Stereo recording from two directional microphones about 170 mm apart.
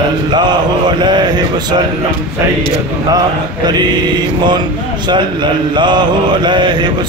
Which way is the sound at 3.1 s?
25° right (ahead or behind).